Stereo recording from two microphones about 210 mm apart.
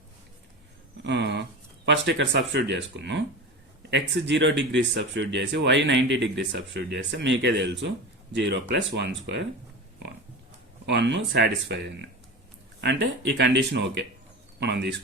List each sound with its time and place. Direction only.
1.0 s speech: 55° right (ahead or behind)
10.8 s speech: 55° right (ahead or behind)